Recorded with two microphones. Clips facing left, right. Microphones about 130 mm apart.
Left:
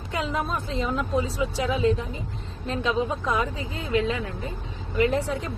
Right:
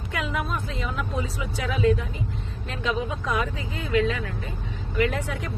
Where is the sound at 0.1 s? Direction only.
30° left (ahead or behind).